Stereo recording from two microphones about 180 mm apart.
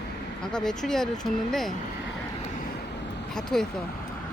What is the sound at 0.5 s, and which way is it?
Speech, 5° left (ahead or behind).